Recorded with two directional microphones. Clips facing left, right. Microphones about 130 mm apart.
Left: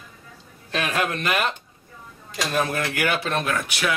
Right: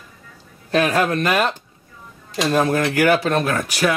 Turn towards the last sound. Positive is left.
turn(degrees=-40)  # may be behind; listen again after turning